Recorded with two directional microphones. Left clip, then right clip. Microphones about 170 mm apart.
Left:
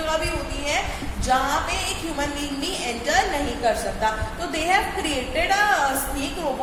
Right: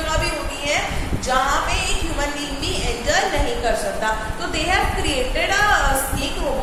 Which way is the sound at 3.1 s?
40° left (ahead or behind).